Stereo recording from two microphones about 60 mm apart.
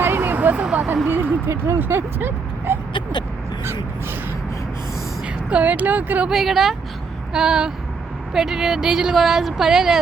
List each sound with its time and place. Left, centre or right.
0.0 s vehicle: right
0.6 s speech: centre
1.0 s speech: right
1.5 s speech: right
1.8 s speech: right
5.2 s speech: right
6.2 s speech: centre